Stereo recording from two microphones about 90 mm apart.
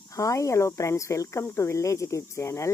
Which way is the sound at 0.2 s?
35° left (ahead or behind).